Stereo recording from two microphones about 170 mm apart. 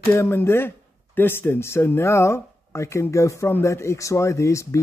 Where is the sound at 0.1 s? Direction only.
15° left (ahead or behind).